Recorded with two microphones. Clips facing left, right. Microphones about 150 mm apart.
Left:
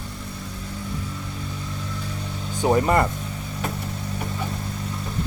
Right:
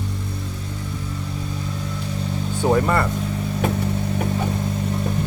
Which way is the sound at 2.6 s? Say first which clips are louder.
Even; 15° left (ahead or behind).